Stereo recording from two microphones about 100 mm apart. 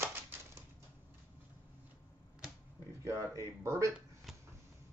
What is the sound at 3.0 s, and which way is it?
Speech, 30° right (ahead or behind).